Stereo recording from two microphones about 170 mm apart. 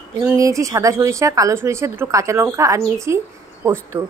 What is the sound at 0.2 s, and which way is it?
Speech, 15° right (ahead or behind).